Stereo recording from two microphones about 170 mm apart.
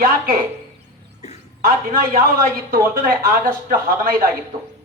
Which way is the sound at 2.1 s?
55° right (ahead or behind).